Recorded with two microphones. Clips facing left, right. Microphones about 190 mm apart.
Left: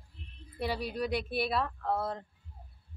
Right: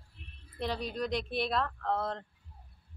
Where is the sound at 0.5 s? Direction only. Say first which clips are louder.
Left 1 dB; 10° left (ahead or behind).